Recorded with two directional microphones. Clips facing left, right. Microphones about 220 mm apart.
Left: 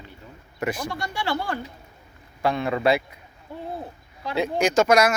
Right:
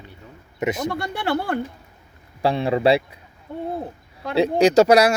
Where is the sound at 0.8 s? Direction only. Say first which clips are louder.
Right 4 dB; 60° right (ahead or behind).